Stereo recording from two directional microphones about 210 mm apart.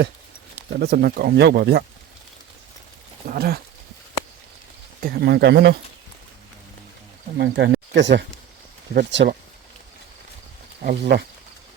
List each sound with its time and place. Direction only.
0.8 s speech: 45° right (ahead or behind)
3.2 s speech: 50° right (ahead or behind)
5.0 s speech: 50° right (ahead or behind)
7.3 s speech: 55° right (ahead or behind)
10.8 s speech: 50° right (ahead or behind)